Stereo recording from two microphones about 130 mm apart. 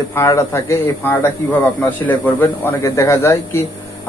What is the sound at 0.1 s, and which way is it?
A man's voice, 20° left (ahead or behind).